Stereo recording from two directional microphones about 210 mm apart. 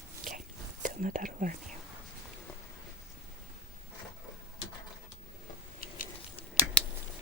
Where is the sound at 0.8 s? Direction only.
40° right (ahead or behind).